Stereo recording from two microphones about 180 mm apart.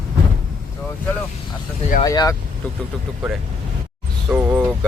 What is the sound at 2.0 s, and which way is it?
Speech, 20° left (ahead or behind).